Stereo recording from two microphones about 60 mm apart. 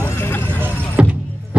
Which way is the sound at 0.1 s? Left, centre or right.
Left.